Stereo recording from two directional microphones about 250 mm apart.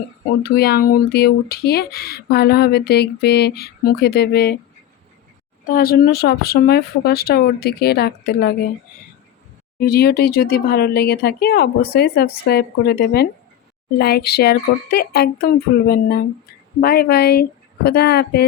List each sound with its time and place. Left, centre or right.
0.4 s speech: left
5.6 s speech: left
9.7 s speech: left